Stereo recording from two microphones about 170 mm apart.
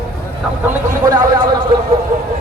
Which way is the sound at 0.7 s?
20° right (ahead or behind).